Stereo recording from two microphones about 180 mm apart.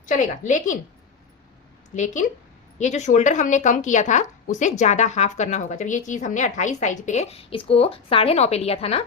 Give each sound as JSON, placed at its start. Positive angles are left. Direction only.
{"t": 0.0, "sound": "a woman's voice", "side_deg": 45}
{"t": 2.7, "sound": "a woman's voice", "side_deg": 40}